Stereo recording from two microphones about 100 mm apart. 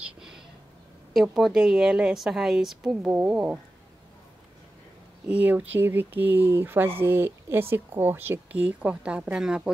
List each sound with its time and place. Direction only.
0.0 s a sound: 5° right (ahead or behind)
1.1 s a woman's voice: centre (ahead or behind)
5.3 s speech: 15° right (ahead or behind)